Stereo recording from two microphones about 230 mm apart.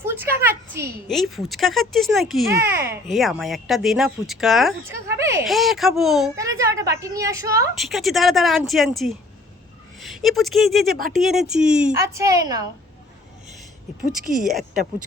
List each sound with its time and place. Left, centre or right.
0.0 s a sound: centre
1.0 s speech: centre
5.0 s a sound: centre
5.5 s speech: centre
6.3 s a sound: centre
7.0 s a woman's voice: centre
7.8 s speech: centre
10.0 s speech: centre
10.8 s speech: right
11.3 s a woman's voice: centre
14.1 s speech: centre